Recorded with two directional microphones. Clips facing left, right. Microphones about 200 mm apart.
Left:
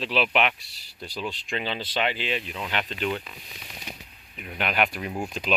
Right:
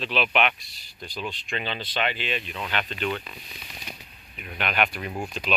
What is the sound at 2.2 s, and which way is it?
Speech, 30° left (ahead or behind).